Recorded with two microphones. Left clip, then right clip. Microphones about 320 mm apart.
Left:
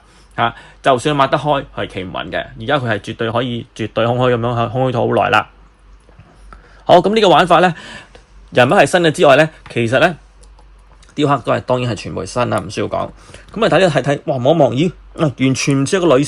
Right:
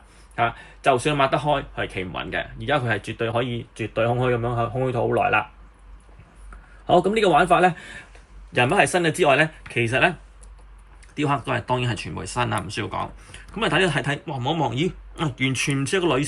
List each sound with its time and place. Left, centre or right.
0.3 s speech: centre
6.8 s a man's voice: centre
11.1 s speech: centre